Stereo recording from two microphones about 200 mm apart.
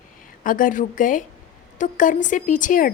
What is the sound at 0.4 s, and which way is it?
A woman's voice, 40° left (ahead or behind).